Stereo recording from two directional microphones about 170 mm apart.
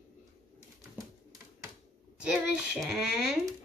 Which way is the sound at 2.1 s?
5° right (ahead or behind).